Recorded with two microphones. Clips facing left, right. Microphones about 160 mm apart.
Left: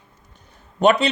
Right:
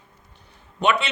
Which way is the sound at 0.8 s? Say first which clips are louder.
Left 6 dB; 40° left (ahead or behind).